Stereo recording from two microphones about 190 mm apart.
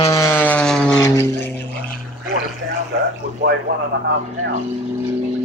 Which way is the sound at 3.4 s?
65° right (ahead or behind).